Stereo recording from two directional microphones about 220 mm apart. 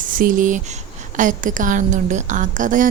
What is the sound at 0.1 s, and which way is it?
A woman's voice, 40° right (ahead or behind).